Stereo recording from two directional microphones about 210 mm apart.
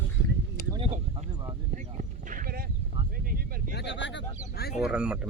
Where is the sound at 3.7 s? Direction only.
55° left (ahead or behind).